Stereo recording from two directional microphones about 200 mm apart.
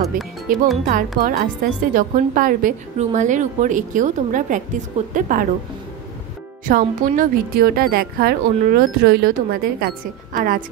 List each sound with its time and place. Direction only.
0.5 s a woman's voice: 45° right (ahead or behind)
6.6 s speech: 45° right (ahead or behind)